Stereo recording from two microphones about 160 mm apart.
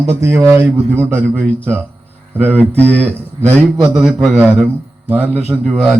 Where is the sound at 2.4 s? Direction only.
10° right (ahead or behind).